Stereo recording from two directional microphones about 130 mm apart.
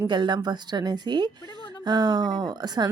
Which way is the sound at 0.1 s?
35° right (ahead or behind).